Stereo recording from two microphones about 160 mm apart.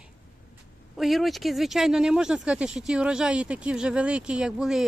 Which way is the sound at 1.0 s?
Centre (ahead or behind).